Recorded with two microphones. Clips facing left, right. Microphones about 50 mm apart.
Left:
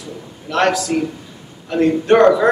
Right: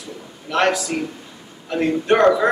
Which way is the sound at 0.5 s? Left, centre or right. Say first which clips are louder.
Left 2 dB; centre.